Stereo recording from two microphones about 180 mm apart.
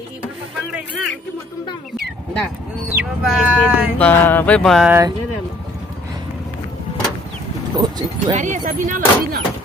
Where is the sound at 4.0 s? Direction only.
10° left (ahead or behind).